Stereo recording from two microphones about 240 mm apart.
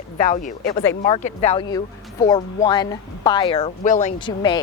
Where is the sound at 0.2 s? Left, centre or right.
Left.